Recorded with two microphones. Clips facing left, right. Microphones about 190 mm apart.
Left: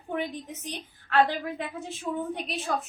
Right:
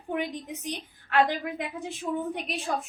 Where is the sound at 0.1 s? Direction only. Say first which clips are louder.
Right 1 dB; 15° right (ahead or behind).